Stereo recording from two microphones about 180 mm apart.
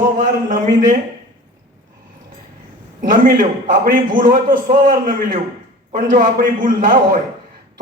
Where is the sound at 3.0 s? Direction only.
50° right (ahead or behind).